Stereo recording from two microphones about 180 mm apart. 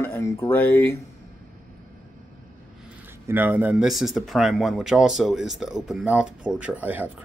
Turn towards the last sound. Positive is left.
turn(degrees=-10)  # may be behind; listen again after turning